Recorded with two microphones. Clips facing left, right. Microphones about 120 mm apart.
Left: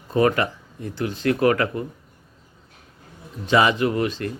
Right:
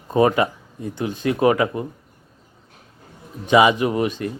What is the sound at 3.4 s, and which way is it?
Speech, 15° right (ahead or behind).